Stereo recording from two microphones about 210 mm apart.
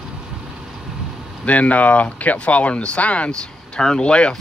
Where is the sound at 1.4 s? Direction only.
5° left (ahead or behind).